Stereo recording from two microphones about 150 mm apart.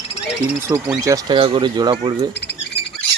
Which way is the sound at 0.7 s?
20° right (ahead or behind).